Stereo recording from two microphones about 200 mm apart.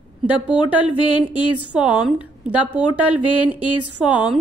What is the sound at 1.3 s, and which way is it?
A woman's voice, 5° right (ahead or behind).